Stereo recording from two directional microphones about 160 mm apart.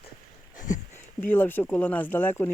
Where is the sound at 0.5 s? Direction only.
55° left (ahead or behind).